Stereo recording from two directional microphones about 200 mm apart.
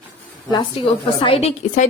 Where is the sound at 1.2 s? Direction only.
30° left (ahead or behind).